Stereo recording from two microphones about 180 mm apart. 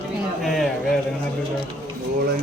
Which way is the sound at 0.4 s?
Centre (ahead or behind).